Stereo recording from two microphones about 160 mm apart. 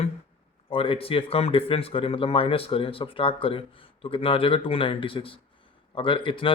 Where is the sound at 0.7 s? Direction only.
35° left (ahead or behind).